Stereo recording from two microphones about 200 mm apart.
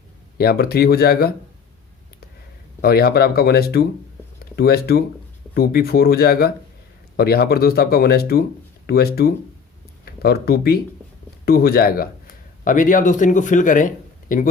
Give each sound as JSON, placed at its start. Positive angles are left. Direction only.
{"t": 0.3, "sound": "speech", "side_deg": 50}
{"t": 2.8, "sound": "speech", "side_deg": 50}